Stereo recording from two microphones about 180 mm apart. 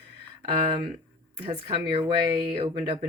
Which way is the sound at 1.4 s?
30° right (ahead or behind).